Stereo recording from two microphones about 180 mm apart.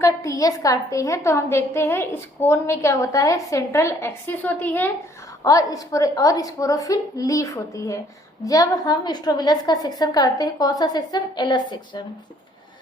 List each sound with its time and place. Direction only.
0.0 s a woman's voice: 15° left (ahead or behind)